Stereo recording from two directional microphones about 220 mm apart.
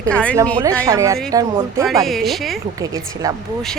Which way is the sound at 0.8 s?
15° right (ahead or behind).